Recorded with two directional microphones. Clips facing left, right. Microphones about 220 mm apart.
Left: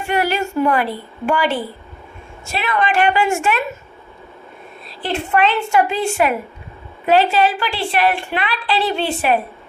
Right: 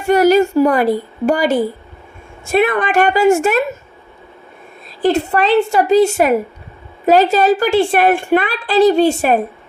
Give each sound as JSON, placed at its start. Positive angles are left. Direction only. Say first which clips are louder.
{"t": 0.0, "sound": "a woman's voice", "louder": "right 9 dB", "side_deg": -40}
{"t": 2.5, "sound": "a woman's voice", "louder": "right 6 dB", "side_deg": -50}
{"t": 5.0, "sound": "a woman's voice", "louder": "right 5 dB", "side_deg": -40}